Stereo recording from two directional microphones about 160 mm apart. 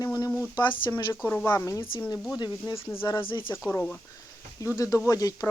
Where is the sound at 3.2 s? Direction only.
30° left (ahead or behind).